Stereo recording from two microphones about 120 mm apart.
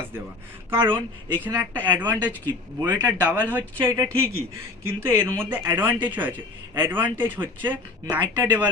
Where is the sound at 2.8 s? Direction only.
35° right (ahead or behind).